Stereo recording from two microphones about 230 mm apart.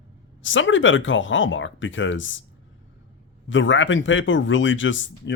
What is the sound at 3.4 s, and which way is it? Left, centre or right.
Speech, left.